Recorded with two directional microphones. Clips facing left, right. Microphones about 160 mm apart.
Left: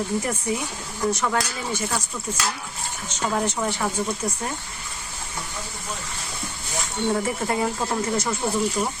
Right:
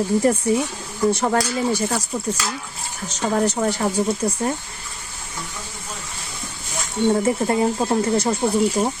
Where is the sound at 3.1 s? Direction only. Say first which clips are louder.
Right 5 dB; 40° right (ahead or behind).